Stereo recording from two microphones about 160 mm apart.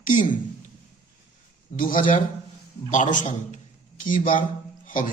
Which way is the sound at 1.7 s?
60° left (ahead or behind).